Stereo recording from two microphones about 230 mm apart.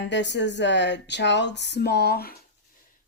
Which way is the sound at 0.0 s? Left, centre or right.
Left.